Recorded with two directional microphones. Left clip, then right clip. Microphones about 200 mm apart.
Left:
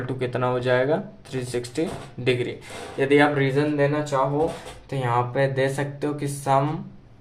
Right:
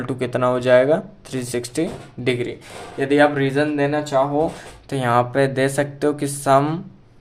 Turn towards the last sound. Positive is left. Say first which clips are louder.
# right 5 dB
turn(degrees=-50)  # may be behind; listen again after turning